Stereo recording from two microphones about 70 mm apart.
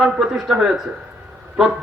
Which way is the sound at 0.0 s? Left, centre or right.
Centre.